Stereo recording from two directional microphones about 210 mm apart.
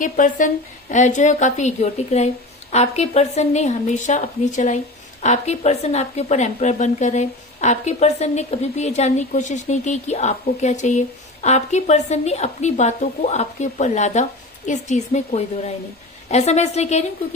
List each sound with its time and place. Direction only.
0.0 s speech: 40° left (ahead or behind)